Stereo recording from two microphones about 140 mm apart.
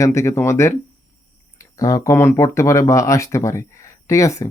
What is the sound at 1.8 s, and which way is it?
Speech, 25° left (ahead or behind).